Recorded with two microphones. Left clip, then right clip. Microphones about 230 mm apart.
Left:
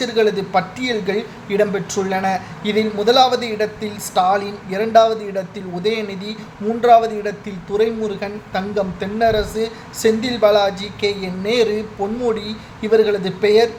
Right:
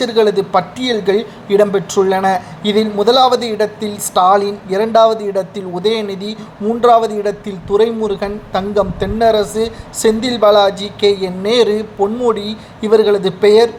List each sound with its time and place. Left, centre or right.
0.0 s a woman's voice: centre